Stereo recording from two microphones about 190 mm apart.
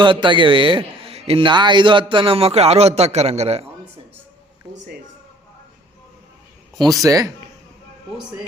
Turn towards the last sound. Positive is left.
turn(degrees=-15)  # may be behind; listen again after turning